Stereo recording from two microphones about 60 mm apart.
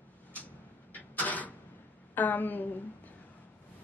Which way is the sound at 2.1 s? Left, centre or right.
Left.